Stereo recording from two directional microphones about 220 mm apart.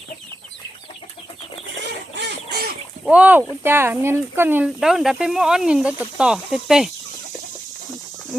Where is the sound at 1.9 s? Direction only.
50° right (ahead or behind).